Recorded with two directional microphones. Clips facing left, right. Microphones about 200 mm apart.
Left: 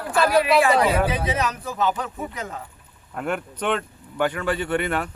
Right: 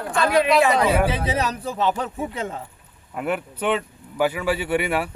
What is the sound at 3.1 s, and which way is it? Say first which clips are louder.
Speech: right 2 dB; 5° right (ahead or behind).